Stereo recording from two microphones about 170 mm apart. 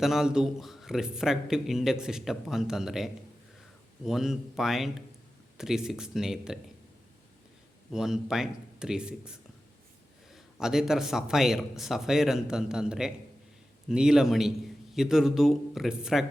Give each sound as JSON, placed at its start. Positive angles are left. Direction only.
{"t": 0.0, "sound": "a man's voice", "side_deg": 0}
{"t": 7.9, "sound": "a man's voice", "side_deg": -5}
{"t": 10.3, "sound": "a man's voice", "side_deg": 0}